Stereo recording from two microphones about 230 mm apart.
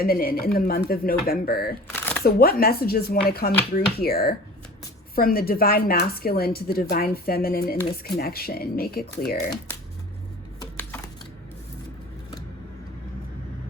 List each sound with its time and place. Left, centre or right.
0.0 s speech: left
1.9 s shuffling cards: centre
2.2 s speech: left
10.8 s a sound: centre